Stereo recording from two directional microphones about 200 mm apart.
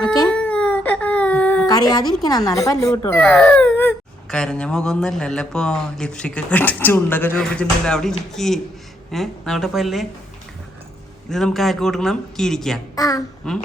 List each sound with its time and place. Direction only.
0.3 s a sound: 5° left (ahead or behind)
1.6 s a sound: 20° left (ahead or behind)
2.2 s a woman's voice: 20° left (ahead or behind)
3.2 s speech: 5° left (ahead or behind)
11.3 s speech: centre (ahead or behind)
13.0 s a woman's voice: 15° left (ahead or behind)
13.5 s speech: 5° left (ahead or behind)